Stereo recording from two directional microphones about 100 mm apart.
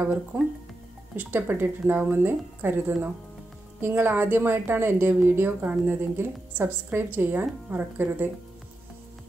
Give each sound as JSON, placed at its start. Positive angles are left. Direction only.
{"t": 0.0, "sound": "a woman's voice", "side_deg": -20}